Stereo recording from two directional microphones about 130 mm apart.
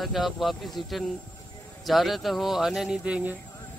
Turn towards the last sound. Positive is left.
turn(degrees=-10)  # may be behind; listen again after turning